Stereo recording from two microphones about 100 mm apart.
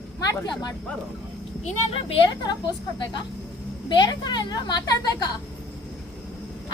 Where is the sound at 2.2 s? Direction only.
45° left (ahead or behind).